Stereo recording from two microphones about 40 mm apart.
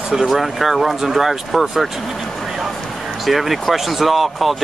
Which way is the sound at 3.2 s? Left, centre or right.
Centre.